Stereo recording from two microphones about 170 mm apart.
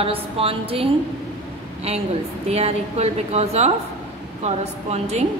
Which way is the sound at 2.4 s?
40° right (ahead or behind).